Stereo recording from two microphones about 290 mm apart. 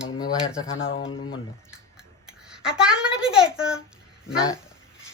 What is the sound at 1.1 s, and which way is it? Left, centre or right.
Speech, centre.